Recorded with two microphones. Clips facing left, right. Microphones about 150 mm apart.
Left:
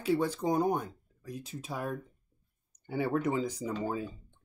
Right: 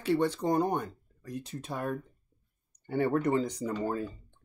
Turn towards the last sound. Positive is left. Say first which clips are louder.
# right 2 dB
turn(degrees=5)  # may be behind; listen again after turning